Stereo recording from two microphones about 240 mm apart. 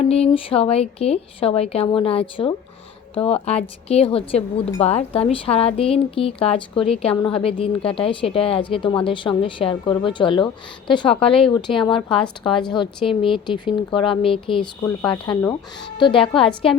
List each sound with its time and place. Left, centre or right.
0.0 s speech: left